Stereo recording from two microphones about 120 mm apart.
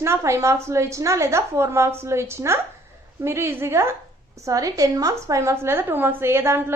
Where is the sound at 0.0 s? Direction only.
25° right (ahead or behind).